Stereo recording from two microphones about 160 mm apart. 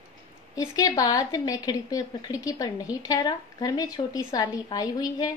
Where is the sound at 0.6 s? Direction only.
20° left (ahead or behind).